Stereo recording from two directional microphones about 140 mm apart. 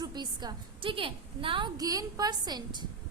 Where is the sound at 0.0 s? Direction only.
30° right (ahead or behind).